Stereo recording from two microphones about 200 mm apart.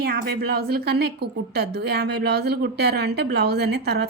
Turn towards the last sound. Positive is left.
turn(degrees=-55)  # may be behind; listen again after turning